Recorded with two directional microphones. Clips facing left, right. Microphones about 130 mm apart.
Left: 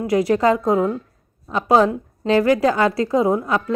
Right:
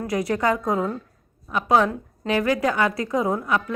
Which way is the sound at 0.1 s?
25° left (ahead or behind).